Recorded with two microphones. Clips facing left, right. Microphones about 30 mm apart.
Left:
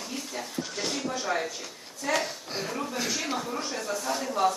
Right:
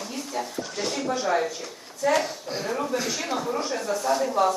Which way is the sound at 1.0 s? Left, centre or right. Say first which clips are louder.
Right 5 dB; centre.